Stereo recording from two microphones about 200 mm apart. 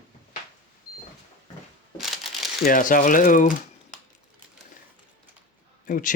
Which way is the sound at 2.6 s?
45° left (ahead or behind).